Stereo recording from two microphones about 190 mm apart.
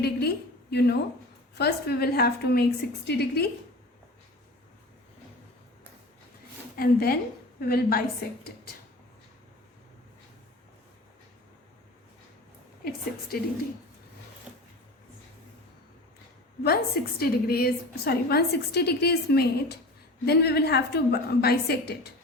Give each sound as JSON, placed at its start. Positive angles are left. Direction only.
{"t": 0.0, "sound": "a woman's voice", "side_deg": 55}
{"t": 6.7, "sound": "a woman's voice", "side_deg": 55}
{"t": 13.3, "sound": "a woman's voice", "side_deg": 50}
{"t": 14.5, "sound": "a sound", "side_deg": -5}
{"t": 16.6, "sound": "a woman's voice", "side_deg": 55}